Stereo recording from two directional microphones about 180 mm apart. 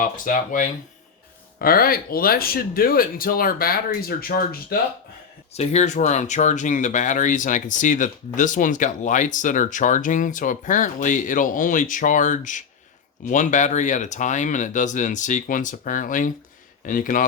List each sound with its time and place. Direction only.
0.0 s speech: 45° left (ahead or behind)
5.5 s speech: 40° left (ahead or behind)